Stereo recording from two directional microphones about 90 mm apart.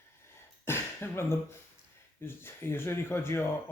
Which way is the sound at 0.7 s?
30° left (ahead or behind).